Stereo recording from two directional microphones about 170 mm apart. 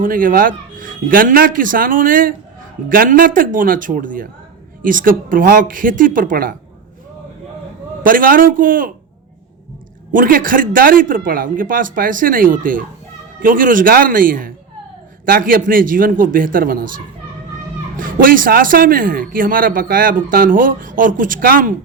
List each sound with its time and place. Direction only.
0.0 s a man's voice: 55° right (ahead or behind)
8.0 s a man's voice: 55° right (ahead or behind)
10.1 s a man's voice: 55° right (ahead or behind)